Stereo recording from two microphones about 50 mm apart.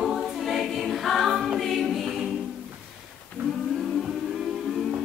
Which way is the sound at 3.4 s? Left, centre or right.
Right.